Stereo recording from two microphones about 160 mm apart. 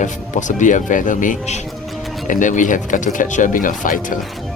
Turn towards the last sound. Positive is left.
turn(degrees=55)  # may be behind; listen again after turning